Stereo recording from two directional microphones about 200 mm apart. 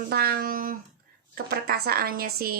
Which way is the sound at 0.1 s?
50° right (ahead or behind).